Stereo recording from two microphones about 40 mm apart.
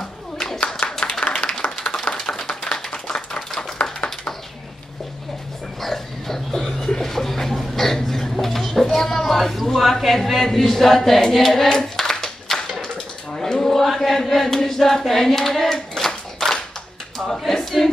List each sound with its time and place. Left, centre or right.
0.8 s clapping: centre
2.1 s a sound: centre
2.7 s clapping: left
5.8 s dog: centre
6.9 s a sound: centre
11.3 s clapping: centre
12.9 s chant: centre
17.5 s choir: centre